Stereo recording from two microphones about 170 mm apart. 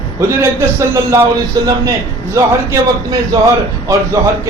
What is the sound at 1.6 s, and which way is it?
A man's voice, 25° right (ahead or behind).